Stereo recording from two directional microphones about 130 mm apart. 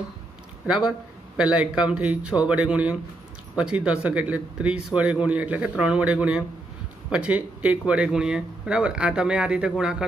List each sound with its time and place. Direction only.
0.7 s speech: 5° right (ahead or behind)